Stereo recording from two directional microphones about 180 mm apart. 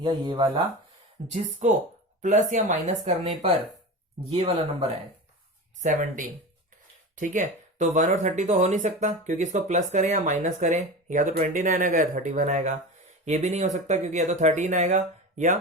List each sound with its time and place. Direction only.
0.0 s speech: 25° right (ahead or behind)
1.3 s speech: 40° right (ahead or behind)
5.8 s speech: 45° right (ahead or behind)